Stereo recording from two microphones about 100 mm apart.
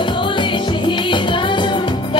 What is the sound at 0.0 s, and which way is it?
Music, 55° left (ahead or behind).